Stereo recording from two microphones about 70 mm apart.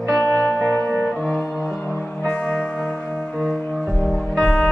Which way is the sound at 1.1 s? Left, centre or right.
Centre.